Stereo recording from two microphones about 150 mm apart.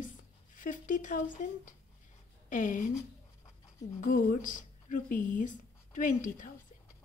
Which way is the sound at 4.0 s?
65° left (ahead or behind).